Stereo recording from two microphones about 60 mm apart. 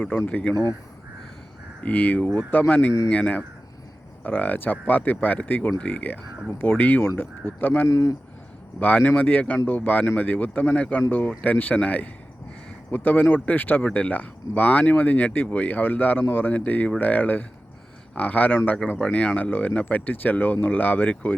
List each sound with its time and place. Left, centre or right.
0.3 s speech: left
1.8 s speech: left
7.9 s speech: left
8.8 s speech: left
18.9 s speech: left